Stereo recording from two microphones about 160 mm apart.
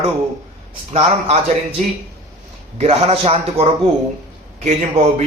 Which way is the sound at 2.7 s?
40° right (ahead or behind).